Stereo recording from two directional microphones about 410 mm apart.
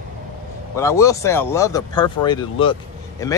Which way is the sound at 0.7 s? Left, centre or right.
Centre.